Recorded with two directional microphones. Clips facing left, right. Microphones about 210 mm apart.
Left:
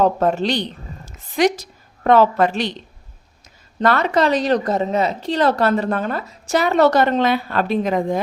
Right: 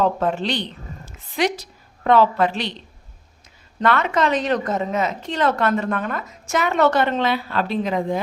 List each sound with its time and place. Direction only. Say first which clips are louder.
0.0 s a woman's voice: left 3 dB; 40° left (ahead or behind)
3.8 s a woman's voice: left 3 dB; 35° left (ahead or behind)